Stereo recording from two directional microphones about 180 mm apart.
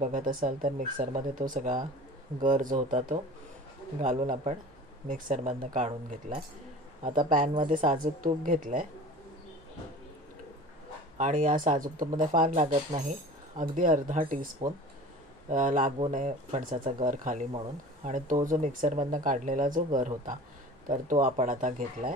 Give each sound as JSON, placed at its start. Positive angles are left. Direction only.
{"t": 0.0, "sound": "speech", "side_deg": -45}
{"t": 11.1, "sound": "speech", "side_deg": -45}